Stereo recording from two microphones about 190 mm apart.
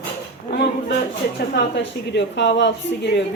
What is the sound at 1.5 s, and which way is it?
A woman's voice, 65° left (ahead or behind).